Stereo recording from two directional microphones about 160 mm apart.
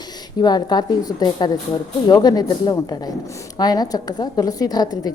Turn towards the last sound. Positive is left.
turn(degrees=25)  # may be behind; listen again after turning